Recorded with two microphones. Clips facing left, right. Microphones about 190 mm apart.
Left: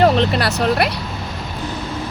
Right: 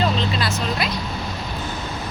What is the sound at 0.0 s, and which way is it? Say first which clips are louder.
Speech: left 7 dB; 65° left (ahead or behind).